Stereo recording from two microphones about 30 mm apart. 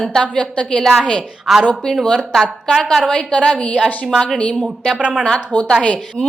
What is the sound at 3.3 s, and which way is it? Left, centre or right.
Speech, left.